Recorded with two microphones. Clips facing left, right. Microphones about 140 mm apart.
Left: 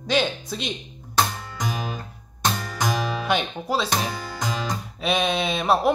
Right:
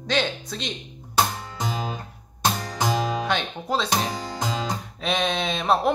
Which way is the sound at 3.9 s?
20° right (ahead or behind).